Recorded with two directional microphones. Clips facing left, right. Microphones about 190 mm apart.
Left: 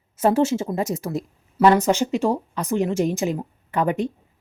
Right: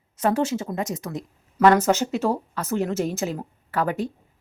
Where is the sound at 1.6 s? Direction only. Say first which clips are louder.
Left 1 dB; 10° left (ahead or behind).